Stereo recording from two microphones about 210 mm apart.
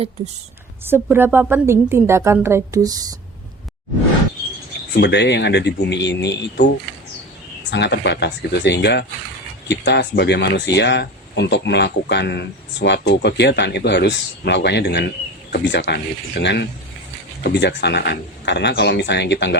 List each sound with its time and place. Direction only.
0.9 s a woman's voice: 10° right (ahead or behind)
4.9 s speech: 55° left (ahead or behind)
7.7 s speech: 55° left (ahead or behind)